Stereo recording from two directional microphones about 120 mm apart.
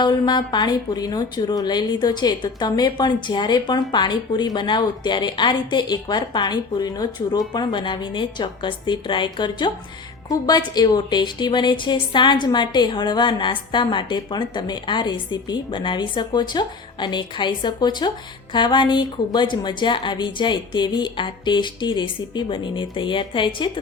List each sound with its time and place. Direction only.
0.0 s speech: 40° left (ahead or behind)